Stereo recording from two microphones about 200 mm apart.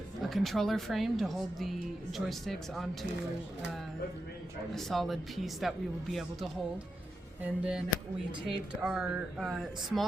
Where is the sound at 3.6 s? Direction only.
60° right (ahead or behind).